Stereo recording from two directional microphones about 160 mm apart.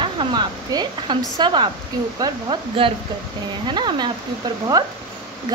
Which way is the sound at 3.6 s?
30° right (ahead or behind).